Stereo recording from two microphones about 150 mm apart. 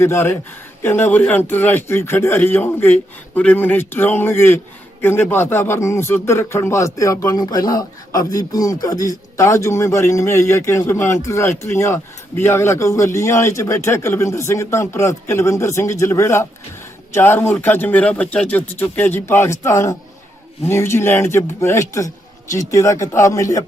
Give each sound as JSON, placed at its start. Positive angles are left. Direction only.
{"t": 0.0, "sound": "a man's voice", "side_deg": 15}